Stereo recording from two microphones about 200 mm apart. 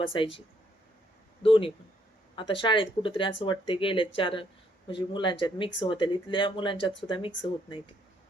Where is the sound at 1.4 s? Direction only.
25° left (ahead or behind).